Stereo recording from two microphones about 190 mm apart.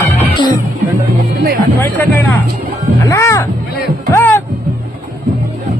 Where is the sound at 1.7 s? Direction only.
10° left (ahead or behind).